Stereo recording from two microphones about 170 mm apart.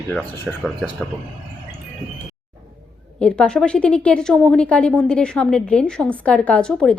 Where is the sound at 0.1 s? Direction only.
Centre (ahead or behind).